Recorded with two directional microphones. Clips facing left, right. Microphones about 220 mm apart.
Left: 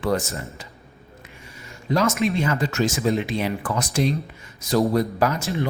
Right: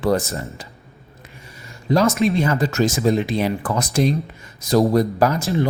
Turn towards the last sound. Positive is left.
turn(degrees=-35)  # may be behind; listen again after turning